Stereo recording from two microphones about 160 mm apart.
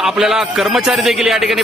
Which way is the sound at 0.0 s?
5° right (ahead or behind).